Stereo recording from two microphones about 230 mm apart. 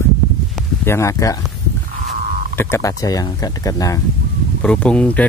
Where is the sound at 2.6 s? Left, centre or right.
Centre.